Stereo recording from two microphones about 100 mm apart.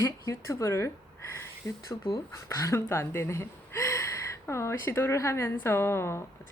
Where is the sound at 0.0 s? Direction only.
30° left (ahead or behind).